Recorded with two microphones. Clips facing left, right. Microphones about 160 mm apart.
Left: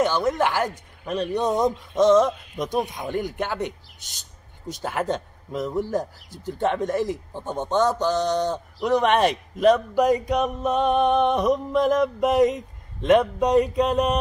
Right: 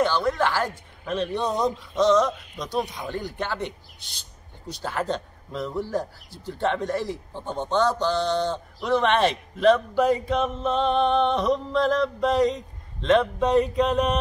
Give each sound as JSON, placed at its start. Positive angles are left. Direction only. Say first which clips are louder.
{"t": 0.0, "sound": "a man's voice", "louder": "left 1 dB", "side_deg": 20}
{"t": 1.4, "sound": "a man's voice", "louder": "left 3 dB", "side_deg": 20}
{"t": 4.8, "sound": "a man's voice", "louder": "left 2 dB", "side_deg": 15}